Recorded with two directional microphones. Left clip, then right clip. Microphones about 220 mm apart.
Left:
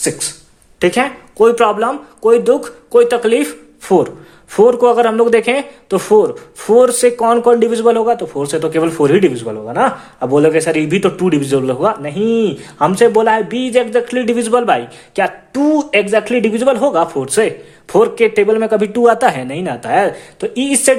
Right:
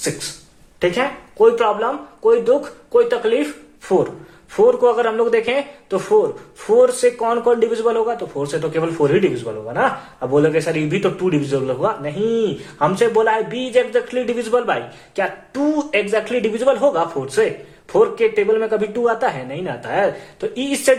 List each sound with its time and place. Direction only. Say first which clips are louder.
0.8 s a man's voice: left 5 dB; 45° left (ahead or behind)